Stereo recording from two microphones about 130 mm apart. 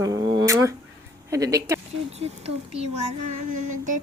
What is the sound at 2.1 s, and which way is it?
Speech, 50° right (ahead or behind).